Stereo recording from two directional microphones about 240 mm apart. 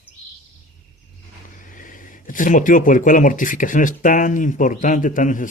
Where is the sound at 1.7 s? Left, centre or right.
Left.